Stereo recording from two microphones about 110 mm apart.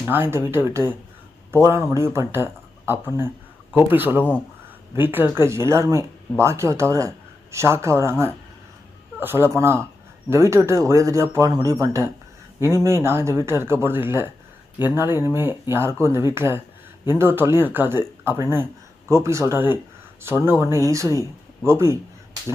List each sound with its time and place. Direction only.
0.1 s speech: 20° right (ahead or behind)
4.2 s speech: 15° left (ahead or behind)
4.9 s speech: 20° right (ahead or behind)